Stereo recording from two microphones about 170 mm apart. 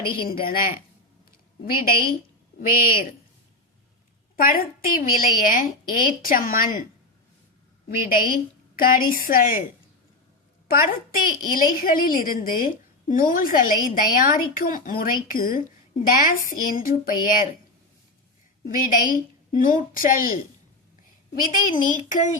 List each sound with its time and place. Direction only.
0.0 s a woman's voice: 30° left (ahead or behind)
0.3 s a woman's voice: 60° left (ahead or behind)
1.7 s a woman's voice: 60° left (ahead or behind)
4.4 s a woman's voice: 60° left (ahead or behind)
7.9 s a woman's voice: 55° left (ahead or behind)
10.7 s a woman's voice: 55° left (ahead or behind)
18.6 s a woman's voice: 55° left (ahead or behind)
21.5 s a woman's voice: 50° left (ahead or behind)